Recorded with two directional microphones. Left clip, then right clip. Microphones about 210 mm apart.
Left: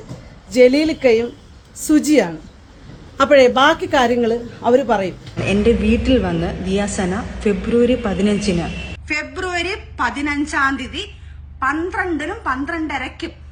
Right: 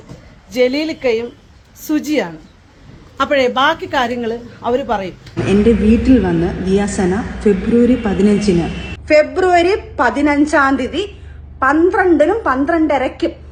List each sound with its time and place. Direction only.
0.5 s a woman's voice: 15° left (ahead or behind)
5.4 s a woman's voice: 30° left (ahead or behind)
6.0 s a woman's voice: 15° left (ahead or behind)